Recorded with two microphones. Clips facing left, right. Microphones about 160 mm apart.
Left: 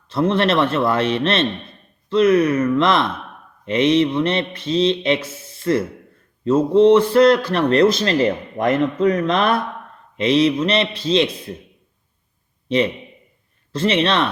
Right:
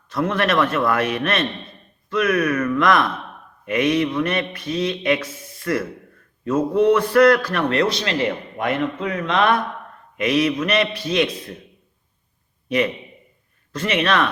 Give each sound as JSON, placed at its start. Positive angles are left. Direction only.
{"t": 0.1, "sound": "speech", "side_deg": 30}
{"t": 7.7, "sound": "a man's voice", "side_deg": 40}
{"t": 10.2, "sound": "speech", "side_deg": 25}
{"t": 12.6, "sound": "a man's voice", "side_deg": 25}